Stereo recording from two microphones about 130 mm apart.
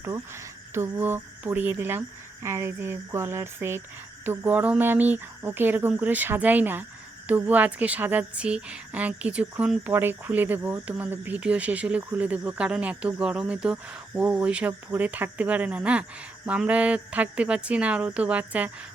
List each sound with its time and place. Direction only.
0.0 s speech: 20° right (ahead or behind)